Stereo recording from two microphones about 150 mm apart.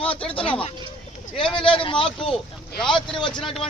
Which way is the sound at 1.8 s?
35° left (ahead or behind).